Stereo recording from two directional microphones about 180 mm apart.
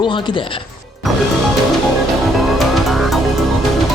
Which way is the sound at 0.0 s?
25° left (ahead or behind).